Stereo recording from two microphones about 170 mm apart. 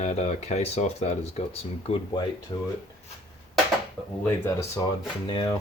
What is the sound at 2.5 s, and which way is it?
Speech, 25° left (ahead or behind).